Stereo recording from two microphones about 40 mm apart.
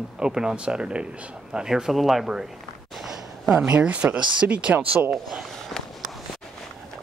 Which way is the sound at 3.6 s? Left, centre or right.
Right.